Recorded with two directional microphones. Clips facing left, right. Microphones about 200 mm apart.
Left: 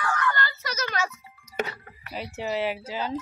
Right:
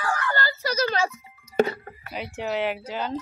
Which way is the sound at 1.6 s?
35° right (ahead or behind).